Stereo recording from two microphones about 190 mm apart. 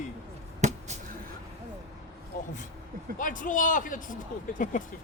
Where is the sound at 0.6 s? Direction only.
35° right (ahead or behind).